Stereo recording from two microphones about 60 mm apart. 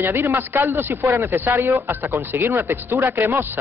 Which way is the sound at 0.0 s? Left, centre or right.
Right.